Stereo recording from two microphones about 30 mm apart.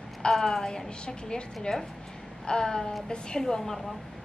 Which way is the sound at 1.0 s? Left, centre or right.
Left.